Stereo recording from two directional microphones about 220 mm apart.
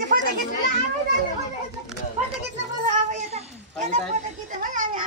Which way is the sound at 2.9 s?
30° right (ahead or behind).